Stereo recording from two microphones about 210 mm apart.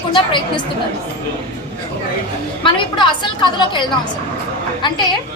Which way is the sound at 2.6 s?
25° left (ahead or behind).